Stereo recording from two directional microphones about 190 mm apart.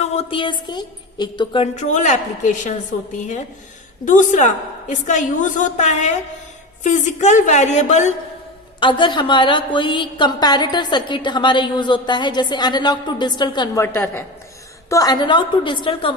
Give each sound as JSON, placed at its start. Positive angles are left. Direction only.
{"t": 0.0, "sound": "a woman's voice", "side_deg": 30}
{"t": 4.0, "sound": "a woman's voice", "side_deg": 40}
{"t": 8.8, "sound": "a woman's voice", "side_deg": 25}
{"t": 13.8, "sound": "a woman's voice", "side_deg": 10}